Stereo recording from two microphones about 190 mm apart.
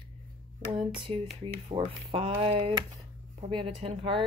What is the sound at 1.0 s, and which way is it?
Speech, 30° right (ahead or behind).